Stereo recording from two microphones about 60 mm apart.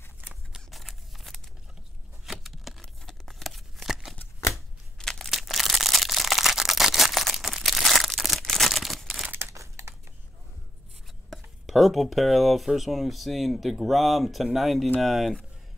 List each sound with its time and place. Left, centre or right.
0.7 s scissors: centre
2.2 s a sound: centre
4.9 s crumpling: centre
5.3 s crushing: centre
8.4 s a sound: centre
9.5 s crumpling: right
11.2 s speech: centre